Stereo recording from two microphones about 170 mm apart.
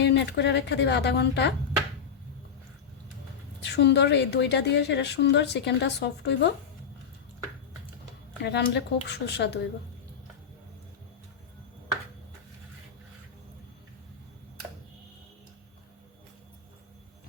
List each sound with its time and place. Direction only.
0.0 s a woman's voice: 90° left
3.6 s a woman's voice: 80° left
8.4 s speech: 90° left